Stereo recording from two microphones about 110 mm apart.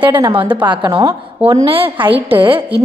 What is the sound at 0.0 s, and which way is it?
A woman's voice, 45° right (ahead or behind).